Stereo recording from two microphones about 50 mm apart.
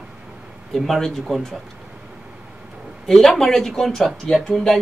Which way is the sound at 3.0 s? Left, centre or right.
Centre.